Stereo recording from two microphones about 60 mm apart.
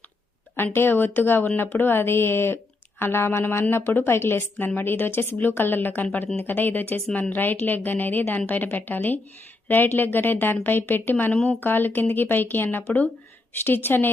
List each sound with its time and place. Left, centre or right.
0.5 s a woman's voice: left
11.3 s speech: centre
11.6 s a woman's voice: left